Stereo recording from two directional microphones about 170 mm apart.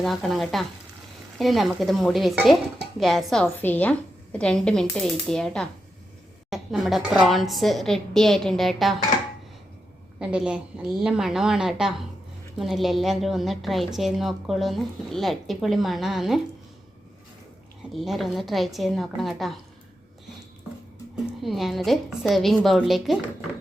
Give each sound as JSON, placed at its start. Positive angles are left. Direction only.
{"t": 0.0, "sound": "a woman's voice", "side_deg": 0}
{"t": 10.2, "sound": "a woman's voice", "side_deg": -5}
{"t": 17.9, "sound": "a woman's voice", "side_deg": 0}
{"t": 21.4, "sound": "a woman's voice", "side_deg": 0}